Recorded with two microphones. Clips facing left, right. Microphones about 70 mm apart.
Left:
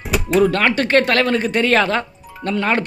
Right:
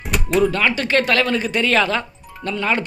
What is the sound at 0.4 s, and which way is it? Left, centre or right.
Speech, left.